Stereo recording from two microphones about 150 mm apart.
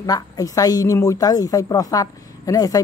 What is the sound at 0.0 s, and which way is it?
Speech, 25° left (ahead or behind).